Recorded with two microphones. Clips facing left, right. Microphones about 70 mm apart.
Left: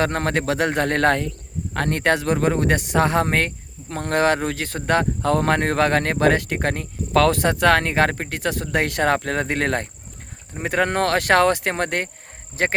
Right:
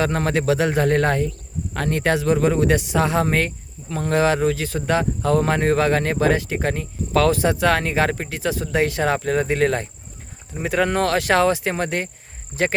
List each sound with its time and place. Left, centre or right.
0.0 s speech: left
1.7 s speech: left
12.6 s speech: left